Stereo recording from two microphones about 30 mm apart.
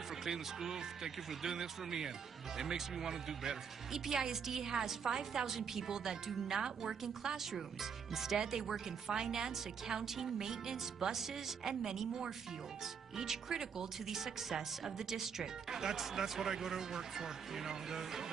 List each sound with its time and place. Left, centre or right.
0.2 s speech: centre
9.1 s a woman's voice: right